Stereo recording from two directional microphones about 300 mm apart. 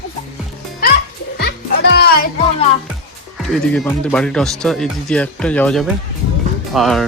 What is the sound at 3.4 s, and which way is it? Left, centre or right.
Speech, centre.